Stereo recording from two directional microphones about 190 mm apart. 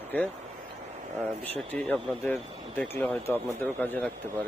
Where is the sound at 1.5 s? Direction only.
5° left (ahead or behind).